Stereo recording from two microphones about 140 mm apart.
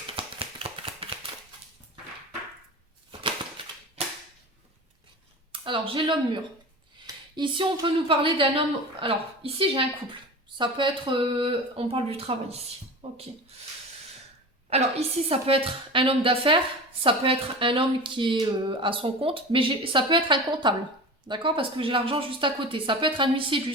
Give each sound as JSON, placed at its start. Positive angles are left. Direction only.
{"t": 0.2, "sound": "a sound", "side_deg": -40}
{"t": 4.0, "sound": "cap gun", "side_deg": -45}
{"t": 5.5, "sound": "speech", "side_deg": -40}
{"t": 14.7, "sound": "speech", "side_deg": -50}